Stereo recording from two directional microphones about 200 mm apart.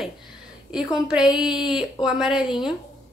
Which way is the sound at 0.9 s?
5° right (ahead or behind).